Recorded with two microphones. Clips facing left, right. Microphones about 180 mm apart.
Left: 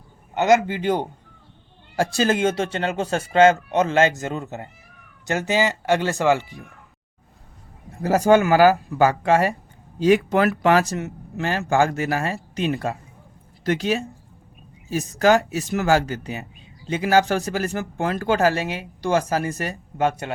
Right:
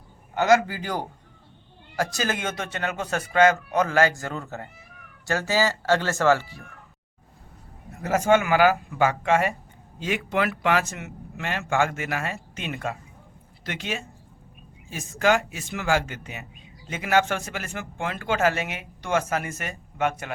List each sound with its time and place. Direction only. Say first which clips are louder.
0.3 s speech: left 2 dB; 20° left (ahead or behind)
7.9 s speech: left 4 dB; 35° left (ahead or behind)